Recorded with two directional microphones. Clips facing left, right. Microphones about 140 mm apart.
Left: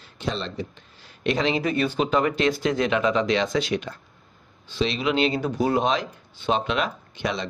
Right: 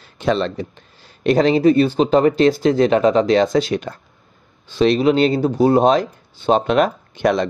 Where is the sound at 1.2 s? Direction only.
40° right (ahead or behind).